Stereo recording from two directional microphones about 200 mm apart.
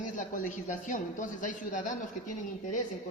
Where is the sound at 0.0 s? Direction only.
40° left (ahead or behind).